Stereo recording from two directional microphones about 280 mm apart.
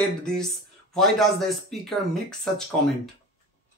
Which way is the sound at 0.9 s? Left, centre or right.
Centre.